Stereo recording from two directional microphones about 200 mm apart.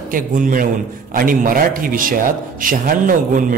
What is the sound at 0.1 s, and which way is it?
A man's voice, 40° right (ahead or behind).